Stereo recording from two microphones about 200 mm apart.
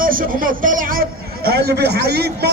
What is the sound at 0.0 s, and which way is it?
A man's voice, 45° right (ahead or behind).